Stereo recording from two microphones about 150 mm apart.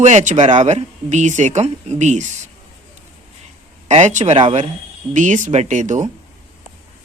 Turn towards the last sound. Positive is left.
turn(degrees=-55)  # may be behind; listen again after turning